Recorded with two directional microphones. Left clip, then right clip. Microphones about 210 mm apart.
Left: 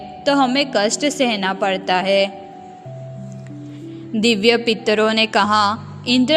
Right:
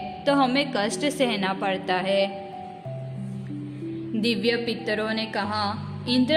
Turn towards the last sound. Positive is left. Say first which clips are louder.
# left 7 dB
turn(degrees=30)  # may be behind; listen again after turning